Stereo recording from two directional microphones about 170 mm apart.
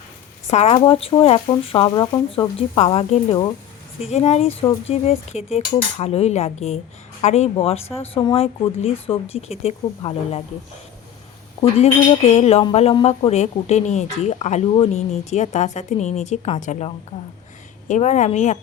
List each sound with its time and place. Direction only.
0.4 s speech: 40° left (ahead or behind)
11.6 s a woman's voice: 40° left (ahead or behind)